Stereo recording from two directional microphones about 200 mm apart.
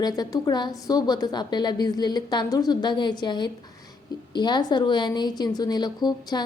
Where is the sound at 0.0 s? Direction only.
20° left (ahead or behind).